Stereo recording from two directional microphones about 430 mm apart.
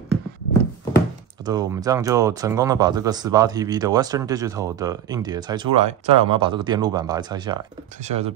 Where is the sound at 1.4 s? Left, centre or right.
Centre.